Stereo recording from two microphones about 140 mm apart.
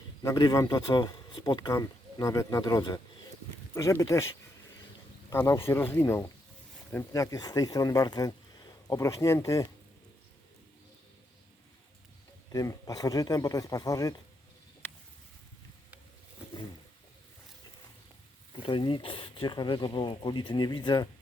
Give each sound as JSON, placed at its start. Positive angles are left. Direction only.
{"t": 0.2, "sound": "a man's voice", "side_deg": 25}
{"t": 5.3, "sound": "a man's voice", "side_deg": 20}
{"t": 12.5, "sound": "a man's voice", "side_deg": 25}
{"t": 18.6, "sound": "speech", "side_deg": 35}